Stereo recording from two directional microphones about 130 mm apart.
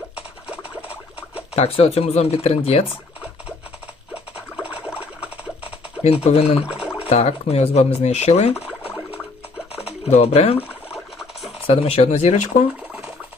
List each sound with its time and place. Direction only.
1.5 s speech: 50° left (ahead or behind)
6.0 s speech: 55° left (ahead or behind)
6.7 s a sound: 5° right (ahead or behind)
7.1 s speech: 55° left (ahead or behind)
8.6 s a sound: 10° right (ahead or behind)
10.1 s speech: 55° left (ahead or behind)
10.9 s scratch: centre (ahead or behind)
11.6 s speech: 50° left (ahead or behind)